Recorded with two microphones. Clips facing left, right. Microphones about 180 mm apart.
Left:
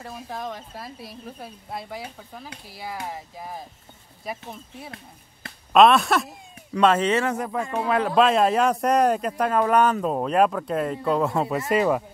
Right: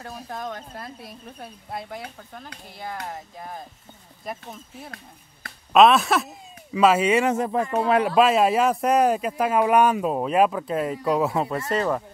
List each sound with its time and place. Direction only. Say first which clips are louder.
0.0 s speech: even; centre (ahead or behind)
7.3 s speech: right 4 dB; 25° right (ahead or behind)
8.0 s speech: left 1 dB; 5° right (ahead or behind); by 12.0 s 10° left (ahead or behind)